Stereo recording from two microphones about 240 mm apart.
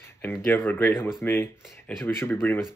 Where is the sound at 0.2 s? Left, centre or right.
Centre.